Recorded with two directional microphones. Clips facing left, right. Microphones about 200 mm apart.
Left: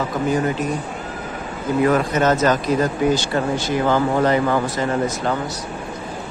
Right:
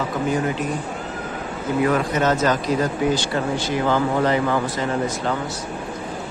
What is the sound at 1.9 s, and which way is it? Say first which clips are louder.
Speech: left 3 dB; 45° left (ahead or behind).